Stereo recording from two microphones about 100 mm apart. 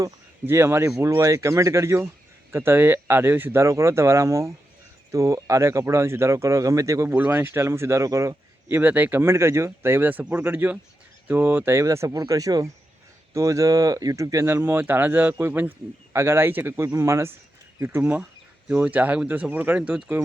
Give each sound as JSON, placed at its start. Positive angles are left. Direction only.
{"t": 0.4, "sound": "speech", "side_deg": -25}
{"t": 8.8, "sound": "speech", "side_deg": -15}